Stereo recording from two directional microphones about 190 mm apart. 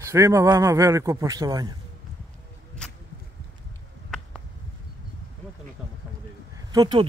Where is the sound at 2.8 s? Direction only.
5° left (ahead or behind).